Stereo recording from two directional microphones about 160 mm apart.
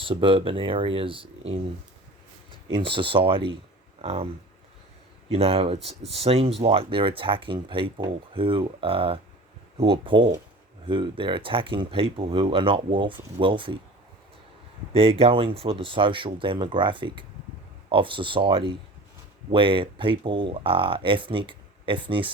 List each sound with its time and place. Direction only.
0.0 s speech: 35° right (ahead or behind)
2.6 s speech: 30° right (ahead or behind)
5.3 s speech: 40° right (ahead or behind)
14.9 s speech: 35° right (ahead or behind)